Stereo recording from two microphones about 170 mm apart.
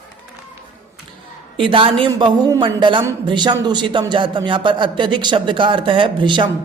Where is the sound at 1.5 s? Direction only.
30° right (ahead or behind).